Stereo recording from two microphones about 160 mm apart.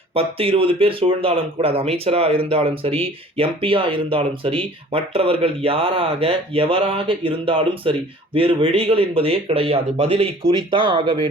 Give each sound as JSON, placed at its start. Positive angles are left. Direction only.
{"t": 0.1, "sound": "speech", "side_deg": -35}